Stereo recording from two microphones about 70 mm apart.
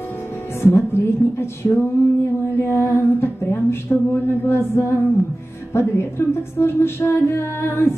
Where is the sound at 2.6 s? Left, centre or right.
Left.